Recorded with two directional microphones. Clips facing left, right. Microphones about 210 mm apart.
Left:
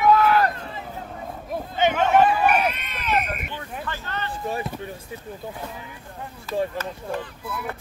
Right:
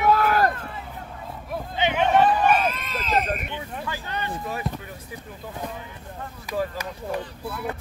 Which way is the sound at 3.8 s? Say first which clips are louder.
Even; 15° right (ahead or behind).